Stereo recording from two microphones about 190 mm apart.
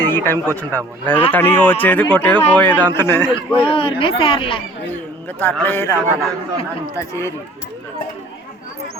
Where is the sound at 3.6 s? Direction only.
30° left (ahead or behind).